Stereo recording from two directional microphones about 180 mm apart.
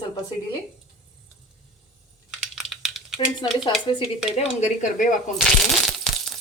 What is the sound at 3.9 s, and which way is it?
Stir, 25° left (ahead or behind).